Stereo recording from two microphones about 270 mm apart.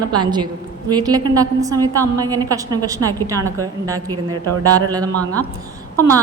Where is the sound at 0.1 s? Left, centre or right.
Centre.